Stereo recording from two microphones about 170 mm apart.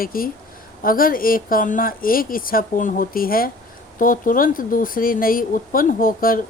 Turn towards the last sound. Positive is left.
turn(degrees=55)  # may be behind; listen again after turning